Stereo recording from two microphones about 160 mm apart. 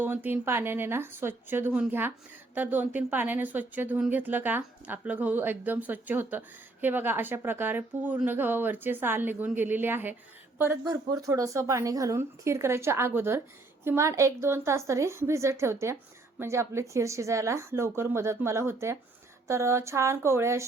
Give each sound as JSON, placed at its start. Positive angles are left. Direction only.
{"t": 0.0, "sound": "a woman's voice", "side_deg": -10}